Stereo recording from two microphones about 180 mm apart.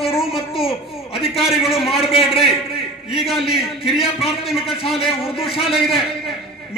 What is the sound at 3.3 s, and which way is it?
Speech, 30° left (ahead or behind).